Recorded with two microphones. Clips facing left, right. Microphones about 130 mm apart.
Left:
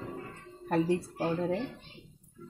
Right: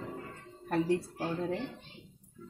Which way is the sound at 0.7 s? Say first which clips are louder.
Left 2 dB; 30° left (ahead or behind).